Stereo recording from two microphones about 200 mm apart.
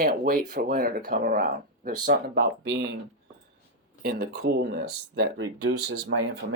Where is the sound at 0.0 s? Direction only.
45° right (ahead or behind).